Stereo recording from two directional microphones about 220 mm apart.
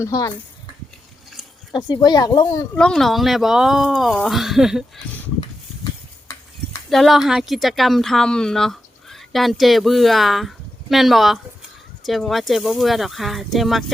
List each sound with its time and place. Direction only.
0.0 s speech: 15° left (ahead or behind)
1.7 s speech: 20° left (ahead or behind)
2.7 s speech: 5° left (ahead or behind)
6.9 s a woman's voice: centre (ahead or behind)